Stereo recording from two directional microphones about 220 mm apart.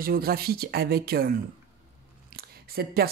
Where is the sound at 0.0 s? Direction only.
45° right (ahead or behind).